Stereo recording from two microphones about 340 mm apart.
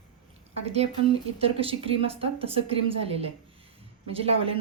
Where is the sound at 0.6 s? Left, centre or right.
Centre.